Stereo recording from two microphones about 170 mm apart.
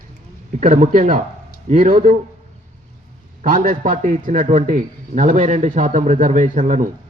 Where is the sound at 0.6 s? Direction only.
45° right (ahead or behind).